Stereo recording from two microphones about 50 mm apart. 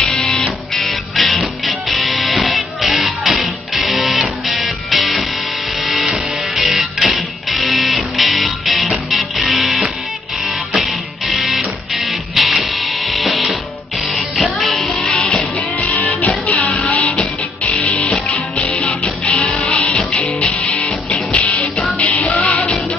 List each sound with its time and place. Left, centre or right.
0.0 s music: centre
0.7 s music: centre
10.9 s music: centre
15.5 s music: left
21.3 s music: left